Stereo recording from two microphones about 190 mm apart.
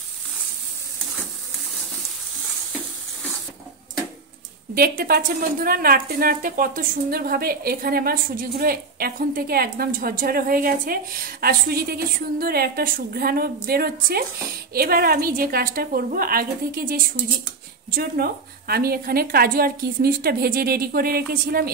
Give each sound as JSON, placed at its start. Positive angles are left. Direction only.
{"t": 4.7, "sound": "a woman's voice", "side_deg": -50}